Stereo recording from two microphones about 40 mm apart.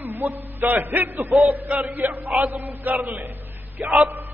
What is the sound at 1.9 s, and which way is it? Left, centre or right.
Chant, right.